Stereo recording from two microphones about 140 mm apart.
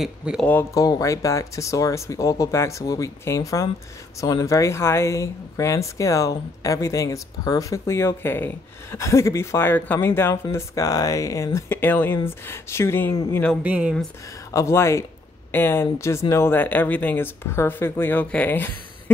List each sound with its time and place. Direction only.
0.0 s speech: 5° right (ahead or behind)
0.7 s speech: 25° left (ahead or behind); by 13.6 s 10° left (ahead or behind)
13.6 s speech: 10° right (ahead or behind)
14.5 s speech: 20° left (ahead or behind)